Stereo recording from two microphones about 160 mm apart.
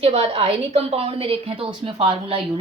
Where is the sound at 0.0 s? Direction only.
40° right (ahead or behind).